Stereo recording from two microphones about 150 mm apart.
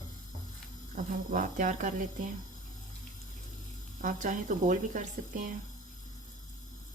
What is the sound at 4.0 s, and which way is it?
Speech, 60° right (ahead or behind).